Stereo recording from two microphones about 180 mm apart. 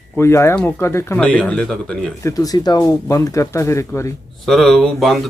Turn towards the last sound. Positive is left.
turn(degrees=0)  # may be behind; listen again after turning